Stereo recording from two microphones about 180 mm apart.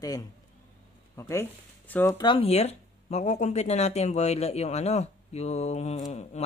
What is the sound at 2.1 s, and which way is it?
Speech, 25° left (ahead or behind).